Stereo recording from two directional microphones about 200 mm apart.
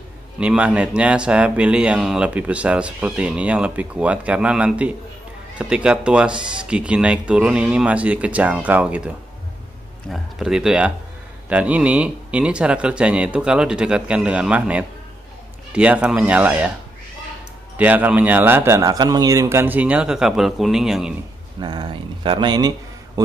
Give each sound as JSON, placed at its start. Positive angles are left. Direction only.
{"t": 0.4, "sound": "a man's voice", "side_deg": -5}
{"t": 17.7, "sound": "a man's voice", "side_deg": -10}
{"t": 21.5, "sound": "speech", "side_deg": -20}